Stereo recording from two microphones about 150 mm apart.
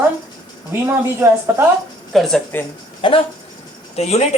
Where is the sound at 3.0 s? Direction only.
35° left (ahead or behind).